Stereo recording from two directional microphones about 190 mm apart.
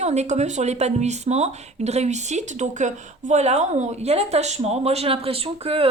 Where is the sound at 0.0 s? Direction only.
35° right (ahead or behind).